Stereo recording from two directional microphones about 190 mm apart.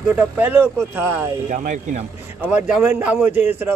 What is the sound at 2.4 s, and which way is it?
Speech, 10° right (ahead or behind).